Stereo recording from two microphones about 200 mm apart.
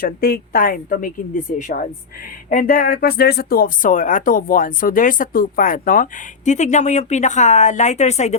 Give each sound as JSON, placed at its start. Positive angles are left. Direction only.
{"t": 0.0, "sound": "speech", "side_deg": 50}